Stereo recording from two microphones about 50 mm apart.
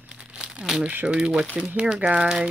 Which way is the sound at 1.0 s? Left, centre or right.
Centre.